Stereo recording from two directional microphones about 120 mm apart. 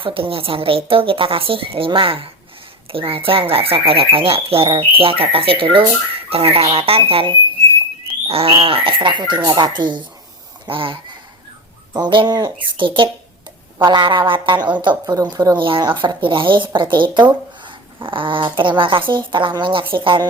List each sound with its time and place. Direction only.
0.0 s speech: 45° right (ahead or behind)